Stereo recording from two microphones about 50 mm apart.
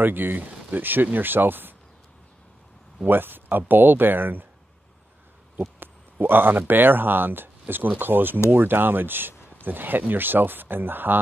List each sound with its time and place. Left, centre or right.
0.0 s speech: right
3.1 s speech: right
5.6 s speech: right